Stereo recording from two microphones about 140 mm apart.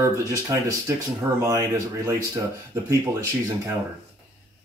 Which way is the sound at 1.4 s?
20° right (ahead or behind).